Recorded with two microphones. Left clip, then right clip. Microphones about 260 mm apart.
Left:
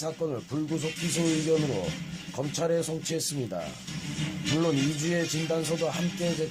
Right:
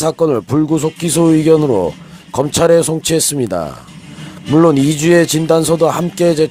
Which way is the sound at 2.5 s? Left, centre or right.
Right.